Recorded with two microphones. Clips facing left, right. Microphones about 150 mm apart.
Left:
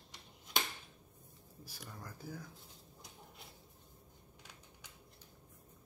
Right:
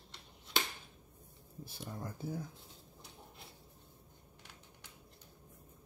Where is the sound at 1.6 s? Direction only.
25° right (ahead or behind).